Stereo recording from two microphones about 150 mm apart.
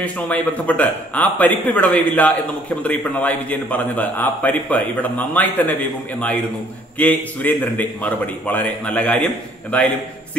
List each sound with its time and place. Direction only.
0.0 s a man's voice: 10° left (ahead or behind)